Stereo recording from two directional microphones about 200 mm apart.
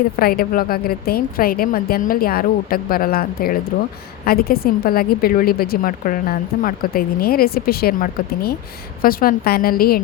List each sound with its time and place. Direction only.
0.2 s a woman's voice: 50° left (ahead or behind)